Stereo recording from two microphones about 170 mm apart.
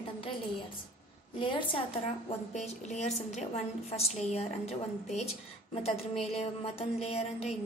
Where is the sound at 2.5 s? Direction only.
40° left (ahead or behind).